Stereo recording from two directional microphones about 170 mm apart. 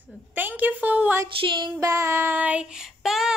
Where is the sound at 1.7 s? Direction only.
20° right (ahead or behind); by 3.3 s centre (ahead or behind).